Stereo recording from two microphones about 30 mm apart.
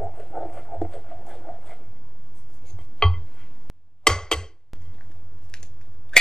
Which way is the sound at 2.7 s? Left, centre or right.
Centre.